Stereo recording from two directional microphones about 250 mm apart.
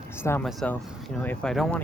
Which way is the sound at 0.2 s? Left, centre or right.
Centre.